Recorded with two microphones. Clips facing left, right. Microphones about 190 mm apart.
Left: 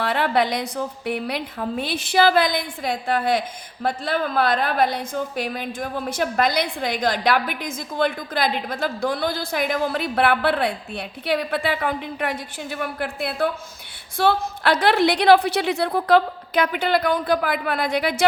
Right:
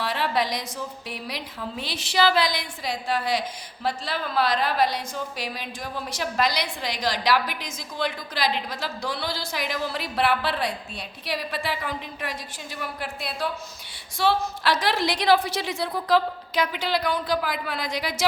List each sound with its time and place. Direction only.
0.0 s a woman's voice: 55° left (ahead or behind)